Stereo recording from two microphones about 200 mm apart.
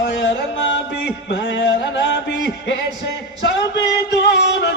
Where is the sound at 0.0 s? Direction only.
65° left (ahead or behind).